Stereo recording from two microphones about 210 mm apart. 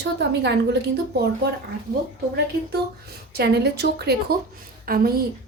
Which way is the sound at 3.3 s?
50° right (ahead or behind).